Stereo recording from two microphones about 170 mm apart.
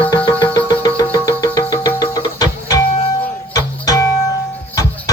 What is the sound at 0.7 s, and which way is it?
Music, 25° left (ahead or behind).